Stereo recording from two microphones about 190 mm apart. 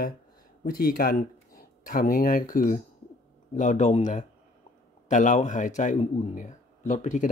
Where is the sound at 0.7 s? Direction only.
50° left (ahead or behind).